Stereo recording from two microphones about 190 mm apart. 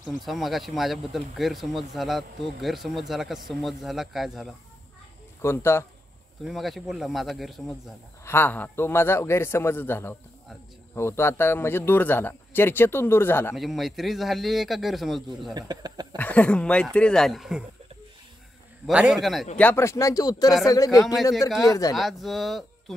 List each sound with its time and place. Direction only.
0.2 s speech: centre (ahead or behind)
5.4 s a man's voice: 15° left (ahead or behind)
6.4 s speech: centre (ahead or behind)
8.3 s a man's voice: 10° left (ahead or behind)
13.6 s speech: centre (ahead or behind)
15.5 s speech: 20° right (ahead or behind)
16.2 s speech: 5° left (ahead or behind)
18.9 s a man's voice: 5° right (ahead or behind); by 21.9 s 20° left (ahead or behind)
21.9 s speech: centre (ahead or behind)